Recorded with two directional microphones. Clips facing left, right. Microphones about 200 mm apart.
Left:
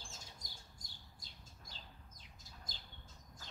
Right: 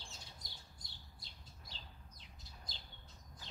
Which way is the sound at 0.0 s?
45° left (ahead or behind).